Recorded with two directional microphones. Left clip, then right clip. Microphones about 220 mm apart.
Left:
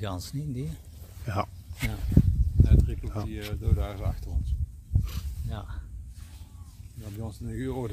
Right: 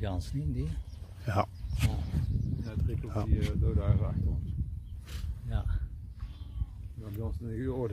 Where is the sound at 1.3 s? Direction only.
Centre (ahead or behind).